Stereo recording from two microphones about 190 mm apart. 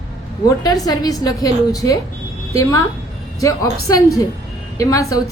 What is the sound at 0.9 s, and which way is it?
A woman's voice, 20° left (ahead or behind).